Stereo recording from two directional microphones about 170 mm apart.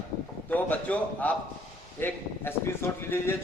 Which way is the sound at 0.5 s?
10° left (ahead or behind).